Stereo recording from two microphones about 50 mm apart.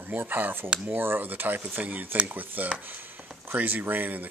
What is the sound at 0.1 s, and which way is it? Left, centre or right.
Speech, right.